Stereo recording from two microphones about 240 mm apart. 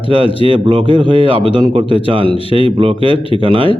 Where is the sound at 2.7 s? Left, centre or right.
Centre.